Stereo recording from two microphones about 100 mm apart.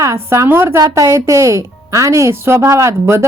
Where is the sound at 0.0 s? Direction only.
30° right (ahead or behind).